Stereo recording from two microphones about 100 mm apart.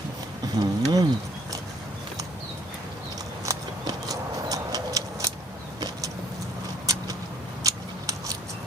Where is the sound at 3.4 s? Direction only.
35° right (ahead or behind).